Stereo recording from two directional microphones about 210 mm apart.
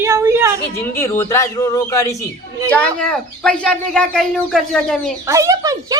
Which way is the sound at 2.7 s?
5° left (ahead or behind).